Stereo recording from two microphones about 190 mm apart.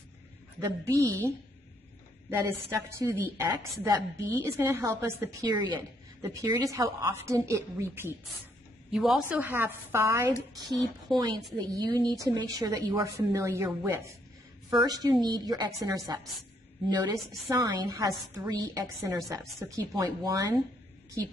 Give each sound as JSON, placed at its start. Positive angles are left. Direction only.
{"t": 0.6, "sound": "a woman's voice", "side_deg": -15}
{"t": 2.7, "sound": "a woman's voice", "side_deg": -15}
{"t": 8.9, "sound": "a woman's voice", "side_deg": -5}